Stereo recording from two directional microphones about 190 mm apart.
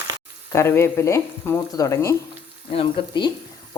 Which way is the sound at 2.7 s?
25° left (ahead or behind).